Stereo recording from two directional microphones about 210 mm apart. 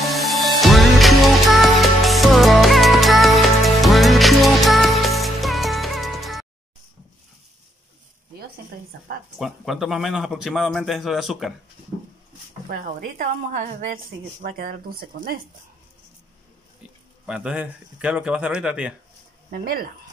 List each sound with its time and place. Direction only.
0.0 s music: centre (ahead or behind)
9.4 s a man's voice: centre (ahead or behind)
12.6 s a woman's voice: 40° right (ahead or behind)
17.3 s a man's voice: 5° right (ahead or behind)
19.6 s a woman's voice: 45° right (ahead or behind)